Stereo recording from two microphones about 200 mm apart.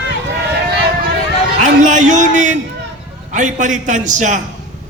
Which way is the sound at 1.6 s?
40° right (ahead or behind).